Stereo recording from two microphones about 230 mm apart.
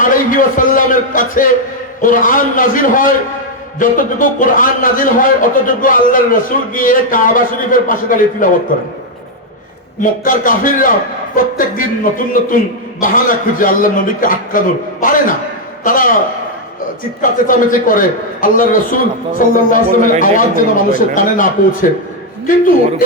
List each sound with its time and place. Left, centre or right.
0.0 s a man's voice: left
10.0 s a man's voice: left